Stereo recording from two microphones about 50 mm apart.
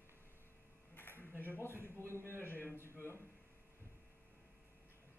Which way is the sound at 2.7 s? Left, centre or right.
Right.